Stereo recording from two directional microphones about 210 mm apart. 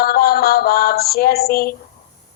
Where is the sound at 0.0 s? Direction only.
45° left (ahead or behind).